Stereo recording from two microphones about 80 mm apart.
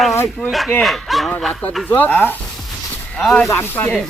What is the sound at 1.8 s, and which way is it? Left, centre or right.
Speech, left.